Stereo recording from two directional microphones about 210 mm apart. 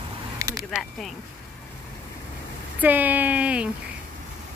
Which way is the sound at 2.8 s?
10° right (ahead or behind).